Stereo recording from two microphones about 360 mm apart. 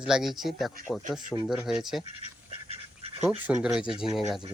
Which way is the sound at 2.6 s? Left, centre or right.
Centre.